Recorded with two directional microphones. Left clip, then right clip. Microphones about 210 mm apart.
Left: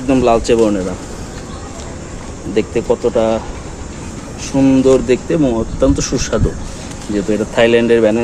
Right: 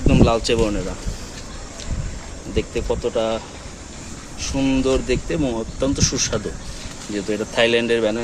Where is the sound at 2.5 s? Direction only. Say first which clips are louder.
Left 8 dB; 10° right (ahead or behind).